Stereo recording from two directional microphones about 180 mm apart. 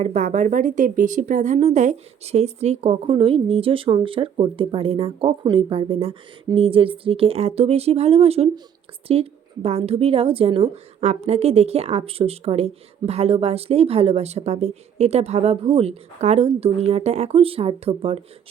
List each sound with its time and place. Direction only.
0.0 s a woman's voice: 40° right (ahead or behind)